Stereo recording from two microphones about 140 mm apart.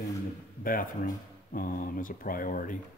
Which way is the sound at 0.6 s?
90° left.